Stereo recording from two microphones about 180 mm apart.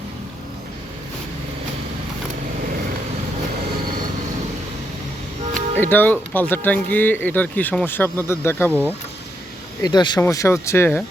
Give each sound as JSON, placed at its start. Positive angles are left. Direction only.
{"t": 5.5, "sound": "speech", "side_deg": 10}
{"t": 9.8, "sound": "speech", "side_deg": 25}